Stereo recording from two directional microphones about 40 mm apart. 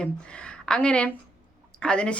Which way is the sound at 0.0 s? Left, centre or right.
Left.